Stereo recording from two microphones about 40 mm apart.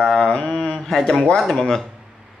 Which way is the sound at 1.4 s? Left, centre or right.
Centre.